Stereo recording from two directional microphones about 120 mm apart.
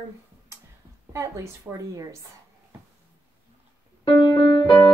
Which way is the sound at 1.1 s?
25° right (ahead or behind).